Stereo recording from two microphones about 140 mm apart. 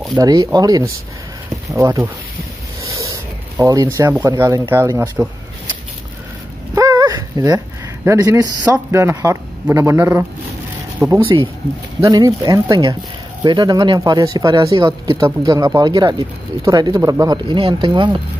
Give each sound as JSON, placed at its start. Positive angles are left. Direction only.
{"t": 0.2, "sound": "speech", "side_deg": -25}
{"t": 6.7, "sound": "dog", "side_deg": -25}
{"t": 8.6, "sound": "a man's voice", "side_deg": -15}
{"t": 12.0, "sound": "speech", "side_deg": -25}